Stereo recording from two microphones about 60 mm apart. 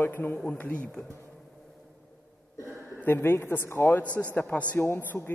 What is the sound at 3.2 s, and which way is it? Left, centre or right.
A man's voice, left.